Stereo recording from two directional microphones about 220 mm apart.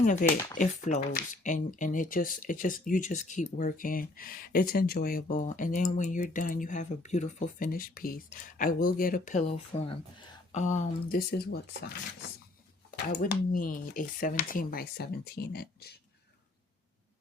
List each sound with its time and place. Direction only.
0.0 s speech: 35° left (ahead or behind)
10.6 s speech: 35° left (ahead or behind)
13.1 s speech: 45° left (ahead or behind)